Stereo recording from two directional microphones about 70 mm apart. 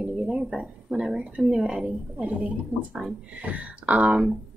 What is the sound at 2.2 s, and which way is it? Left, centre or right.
Speech, centre.